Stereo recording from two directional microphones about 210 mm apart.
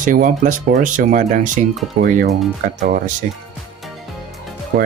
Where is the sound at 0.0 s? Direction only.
40° right (ahead or behind).